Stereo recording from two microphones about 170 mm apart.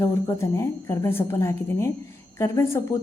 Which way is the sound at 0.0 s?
15° left (ahead or behind).